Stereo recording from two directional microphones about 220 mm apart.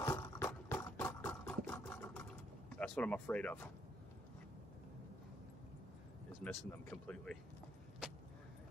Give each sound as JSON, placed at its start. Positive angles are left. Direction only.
{"t": 0.0, "sound": "a sound", "side_deg": 15}
{"t": 2.7, "sound": "speech", "side_deg": 5}
{"t": 6.4, "sound": "speech", "side_deg": 5}